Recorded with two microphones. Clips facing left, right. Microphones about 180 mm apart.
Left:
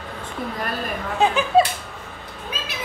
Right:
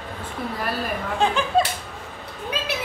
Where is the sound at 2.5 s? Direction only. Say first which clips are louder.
Right 5 dB; 70° right (ahead or behind).